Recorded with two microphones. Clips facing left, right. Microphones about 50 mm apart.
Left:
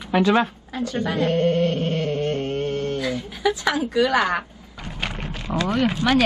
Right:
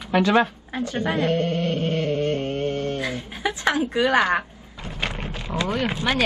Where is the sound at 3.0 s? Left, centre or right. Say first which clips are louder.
Left 2 dB; right.